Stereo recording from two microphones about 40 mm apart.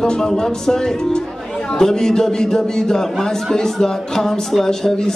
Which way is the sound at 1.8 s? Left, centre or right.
Centre.